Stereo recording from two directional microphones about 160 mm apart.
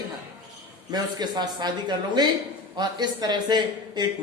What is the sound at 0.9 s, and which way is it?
Speech, 25° right (ahead or behind).